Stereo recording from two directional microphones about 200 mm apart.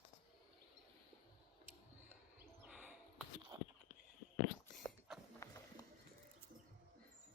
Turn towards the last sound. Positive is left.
turn(degrees=15)  # may be behind; listen again after turning